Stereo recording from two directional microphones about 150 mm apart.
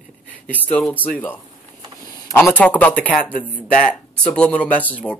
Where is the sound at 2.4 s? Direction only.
10° left (ahead or behind).